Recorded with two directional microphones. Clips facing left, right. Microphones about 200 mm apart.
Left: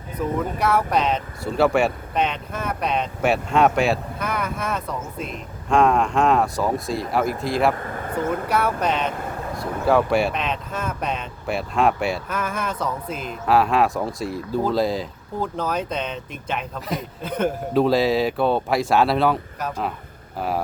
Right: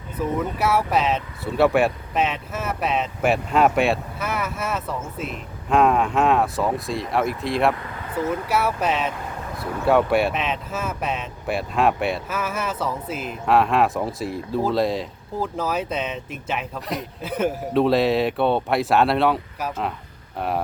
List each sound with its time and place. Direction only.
0.3 s speech: 5° right (ahead or behind)
7.8 s speech: 45° left (ahead or behind)
8.4 s speech: 5° right (ahead or behind)